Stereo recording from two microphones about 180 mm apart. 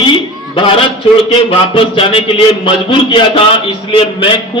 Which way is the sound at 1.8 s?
30° left (ahead or behind).